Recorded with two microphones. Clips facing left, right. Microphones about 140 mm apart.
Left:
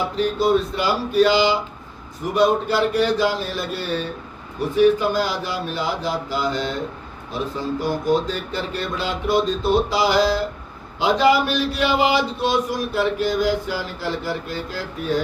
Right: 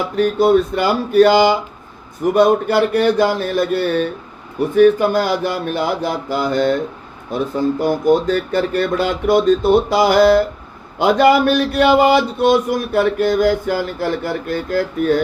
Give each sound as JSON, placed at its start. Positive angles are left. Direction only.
{"t": 0.2, "sound": "a man's voice", "side_deg": -55}
{"t": 2.3, "sound": "a sound", "side_deg": -55}
{"t": 7.5, "sound": "a man's voice", "side_deg": -50}